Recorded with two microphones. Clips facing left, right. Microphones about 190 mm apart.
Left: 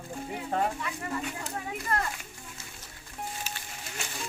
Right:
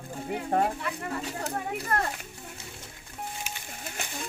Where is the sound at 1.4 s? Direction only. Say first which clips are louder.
Right 4 dB; 65° right (ahead or behind).